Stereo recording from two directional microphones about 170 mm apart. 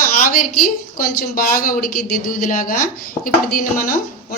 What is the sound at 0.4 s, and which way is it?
A woman's voice, 55° left (ahead or behind).